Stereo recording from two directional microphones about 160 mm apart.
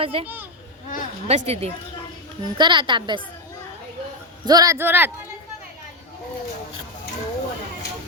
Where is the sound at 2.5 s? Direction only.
30° right (ahead or behind).